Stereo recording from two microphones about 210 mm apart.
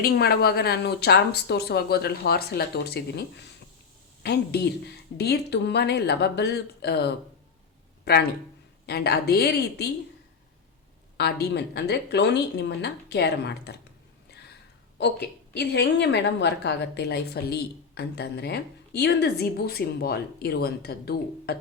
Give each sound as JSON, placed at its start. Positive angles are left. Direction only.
{"t": 0.0, "sound": "a woman's voice", "side_deg": 50}
{"t": 11.2, "sound": "a woman's voice", "side_deg": 50}
{"t": 14.9, "sound": "a woman's voice", "side_deg": 50}